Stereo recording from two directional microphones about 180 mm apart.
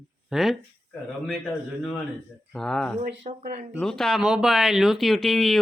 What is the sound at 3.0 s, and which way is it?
Speech, 45° right (ahead or behind).